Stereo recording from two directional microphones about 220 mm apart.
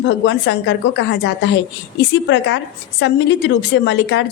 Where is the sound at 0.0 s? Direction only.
55° left (ahead or behind).